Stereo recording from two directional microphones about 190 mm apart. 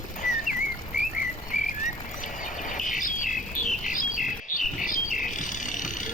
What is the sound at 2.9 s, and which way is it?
Bird, 45° left (ahead or behind).